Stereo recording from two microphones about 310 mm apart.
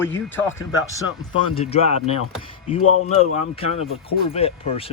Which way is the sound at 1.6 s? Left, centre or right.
Centre.